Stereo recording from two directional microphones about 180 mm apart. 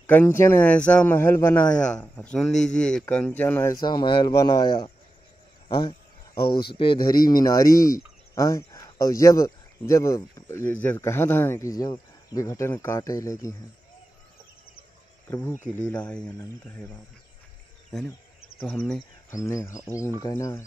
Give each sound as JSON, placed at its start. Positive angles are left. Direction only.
{"t": 0.0, "sound": "speech", "side_deg": 10}
{"t": 15.2, "sound": "speech", "side_deg": 15}
{"t": 18.6, "sound": "speech", "side_deg": 5}
{"t": 19.3, "sound": "speech", "side_deg": 15}